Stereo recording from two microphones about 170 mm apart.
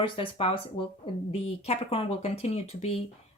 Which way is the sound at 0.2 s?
35° left (ahead or behind).